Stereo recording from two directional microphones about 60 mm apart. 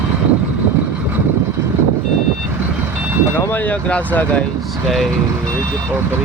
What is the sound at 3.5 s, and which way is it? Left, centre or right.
Speech, left.